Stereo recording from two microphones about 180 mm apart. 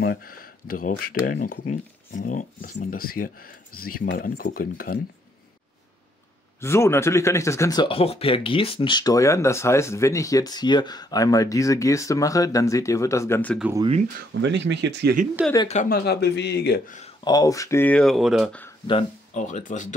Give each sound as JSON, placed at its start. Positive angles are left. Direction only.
{"t": 0.0, "sound": "speech", "side_deg": 60}
{"t": 6.6, "sound": "speech", "side_deg": 15}
{"t": 14.4, "sound": "speech", "side_deg": -75}
{"t": 15.4, "sound": "speech", "side_deg": -5}
{"t": 15.7, "sound": "speech", "side_deg": 50}
{"t": 17.2, "sound": "speech", "side_deg": 20}
{"t": 19.3, "sound": "speech", "side_deg": 40}